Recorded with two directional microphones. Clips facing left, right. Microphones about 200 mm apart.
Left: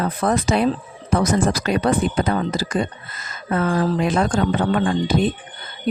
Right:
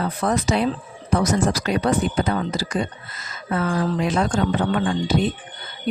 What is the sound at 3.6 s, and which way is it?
Speech, 40° left (ahead or behind).